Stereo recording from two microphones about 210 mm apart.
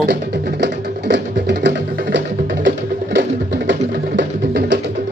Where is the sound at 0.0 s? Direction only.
55° right (ahead or behind).